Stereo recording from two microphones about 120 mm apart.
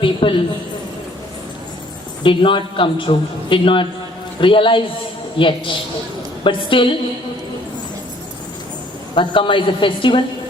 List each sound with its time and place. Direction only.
0.0 s a sound: 45° left (ahead or behind)
2.2 s a man's voice: 45° left (ahead or behind)
9.1 s a man's voice: 45° left (ahead or behind)